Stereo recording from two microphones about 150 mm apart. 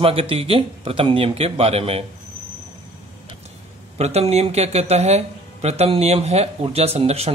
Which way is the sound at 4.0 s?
45° right (ahead or behind).